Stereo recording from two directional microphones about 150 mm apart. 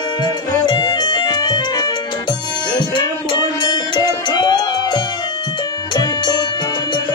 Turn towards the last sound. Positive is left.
turn(degrees=25)  # may be behind; listen again after turning